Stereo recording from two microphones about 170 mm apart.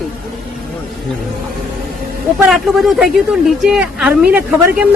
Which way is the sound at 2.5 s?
Centre (ahead or behind).